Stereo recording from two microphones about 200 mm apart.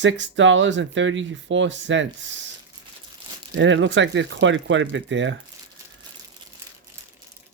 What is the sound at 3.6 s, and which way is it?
Speech, 65° right (ahead or behind).